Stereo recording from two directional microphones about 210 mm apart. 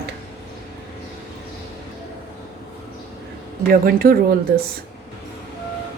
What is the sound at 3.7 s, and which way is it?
Speech, 45° right (ahead or behind).